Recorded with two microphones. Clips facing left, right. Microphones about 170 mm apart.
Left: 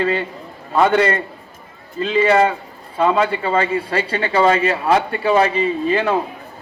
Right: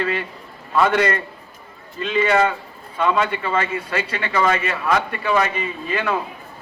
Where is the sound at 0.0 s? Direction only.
25° left (ahead or behind).